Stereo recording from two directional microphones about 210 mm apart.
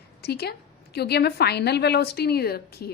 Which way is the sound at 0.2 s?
50° left (ahead or behind).